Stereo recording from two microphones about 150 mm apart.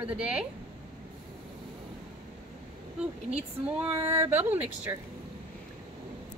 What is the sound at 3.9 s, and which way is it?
Speech, 40° right (ahead or behind).